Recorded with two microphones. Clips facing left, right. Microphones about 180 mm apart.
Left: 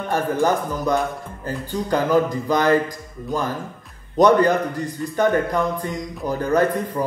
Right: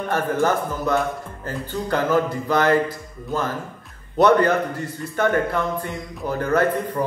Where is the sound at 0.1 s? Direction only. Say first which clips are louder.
Left 1 dB; 15° left (ahead or behind).